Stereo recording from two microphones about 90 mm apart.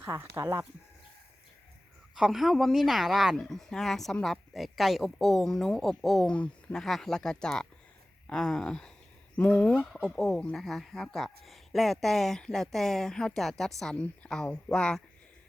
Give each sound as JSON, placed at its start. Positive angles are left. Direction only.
{"t": 0.0, "sound": "speech", "side_deg": -30}
{"t": 2.1, "sound": "speech", "side_deg": -5}
{"t": 6.3, "sound": "speech", "side_deg": 15}
{"t": 6.8, "sound": "speech", "side_deg": 5}